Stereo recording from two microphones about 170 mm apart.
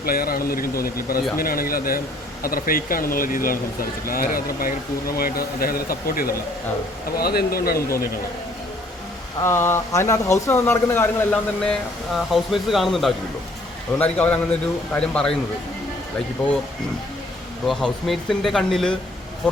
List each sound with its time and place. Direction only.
0.0 s speech: 60° left (ahead or behind)
9.4 s speech: 15° left (ahead or behind)
17.7 s speech: centre (ahead or behind)